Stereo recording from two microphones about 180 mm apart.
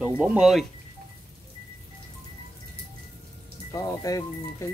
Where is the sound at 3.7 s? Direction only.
20° left (ahead or behind).